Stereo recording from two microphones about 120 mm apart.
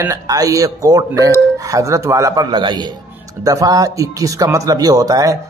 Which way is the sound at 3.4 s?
30° right (ahead or behind).